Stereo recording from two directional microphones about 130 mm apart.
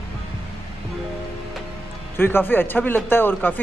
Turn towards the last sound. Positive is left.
turn(degrees=15)  # may be behind; listen again after turning